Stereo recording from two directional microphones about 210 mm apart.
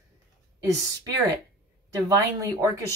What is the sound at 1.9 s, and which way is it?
Speech, 15° right (ahead or behind).